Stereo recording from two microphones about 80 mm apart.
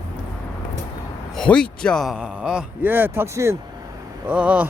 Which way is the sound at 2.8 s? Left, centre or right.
Right.